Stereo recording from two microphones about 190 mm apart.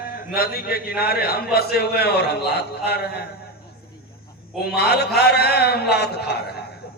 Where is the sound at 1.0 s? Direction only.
55° left (ahead or behind).